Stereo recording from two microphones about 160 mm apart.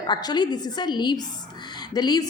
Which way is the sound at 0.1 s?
25° left (ahead or behind).